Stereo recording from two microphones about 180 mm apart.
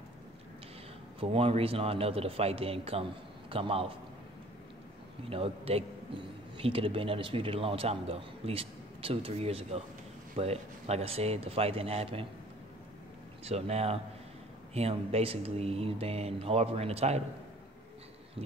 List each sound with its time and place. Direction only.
1.2 s a man's voice: 30° right (ahead or behind)
5.3 s a man's voice: 30° right (ahead or behind)
13.4 s a man's voice: 35° right (ahead or behind)